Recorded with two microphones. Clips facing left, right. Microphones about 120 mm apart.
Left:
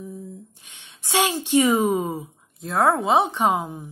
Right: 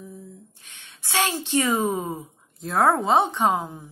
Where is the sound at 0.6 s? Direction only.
15° left (ahead or behind).